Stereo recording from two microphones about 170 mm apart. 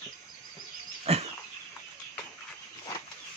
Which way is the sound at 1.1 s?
35° right (ahead or behind).